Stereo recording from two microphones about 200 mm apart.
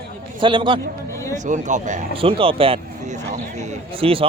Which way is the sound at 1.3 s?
40° right (ahead or behind).